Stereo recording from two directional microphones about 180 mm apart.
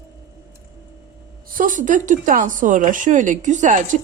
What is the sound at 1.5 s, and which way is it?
Speech, 50° right (ahead or behind).